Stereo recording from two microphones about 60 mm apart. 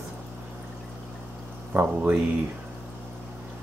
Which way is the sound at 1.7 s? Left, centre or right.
Right.